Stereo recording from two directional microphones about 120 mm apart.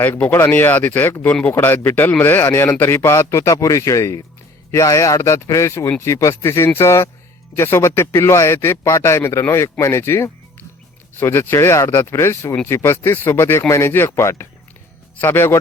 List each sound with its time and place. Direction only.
0.0 s speech: 15° left (ahead or behind)